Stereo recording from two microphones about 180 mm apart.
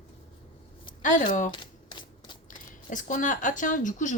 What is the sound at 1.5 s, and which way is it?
Typewriter, 25° left (ahead or behind).